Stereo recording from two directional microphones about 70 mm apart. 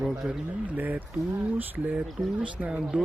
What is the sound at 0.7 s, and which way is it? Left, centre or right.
Speech, right.